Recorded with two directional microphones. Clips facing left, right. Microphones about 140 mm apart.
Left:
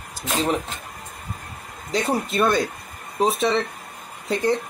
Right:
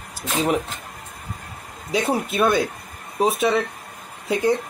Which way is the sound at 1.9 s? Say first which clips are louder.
Right 1 dB; 10° right (ahead or behind).